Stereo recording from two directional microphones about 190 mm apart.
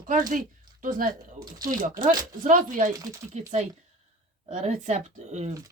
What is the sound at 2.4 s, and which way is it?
Speech, 45° right (ahead or behind).